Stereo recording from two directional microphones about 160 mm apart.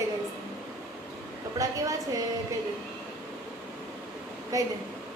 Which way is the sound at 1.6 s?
20° right (ahead or behind).